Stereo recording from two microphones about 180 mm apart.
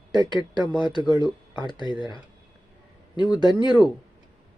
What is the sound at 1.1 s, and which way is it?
Speech, 5° right (ahead or behind).